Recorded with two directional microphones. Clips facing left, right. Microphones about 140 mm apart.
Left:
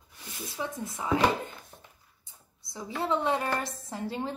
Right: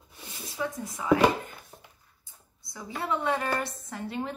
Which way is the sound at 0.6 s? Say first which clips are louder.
Right 2 dB; 25° left (ahead or behind).